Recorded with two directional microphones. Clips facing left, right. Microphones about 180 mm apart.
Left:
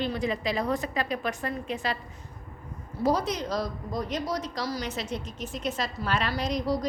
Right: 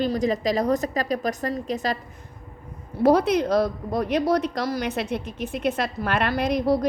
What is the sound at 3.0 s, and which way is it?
A woman's voice, 60° right (ahead or behind).